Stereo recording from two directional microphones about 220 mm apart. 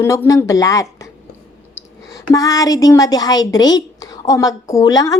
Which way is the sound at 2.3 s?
15° left (ahead or behind).